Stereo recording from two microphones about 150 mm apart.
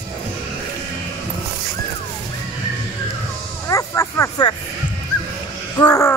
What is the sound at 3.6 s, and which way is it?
Speech, 20° left (ahead or behind).